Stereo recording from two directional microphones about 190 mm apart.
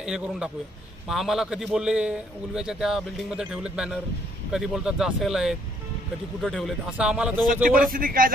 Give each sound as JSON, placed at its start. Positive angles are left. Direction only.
{"t": 0.0, "sound": "a man's voice", "side_deg": -5}
{"t": 7.9, "sound": "a man's voice", "side_deg": -50}